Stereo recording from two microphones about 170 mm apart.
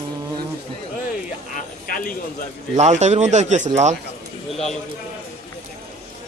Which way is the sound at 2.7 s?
45° right (ahead or behind).